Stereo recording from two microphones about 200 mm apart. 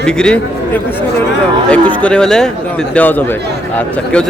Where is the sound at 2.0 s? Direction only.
5° left (ahead or behind).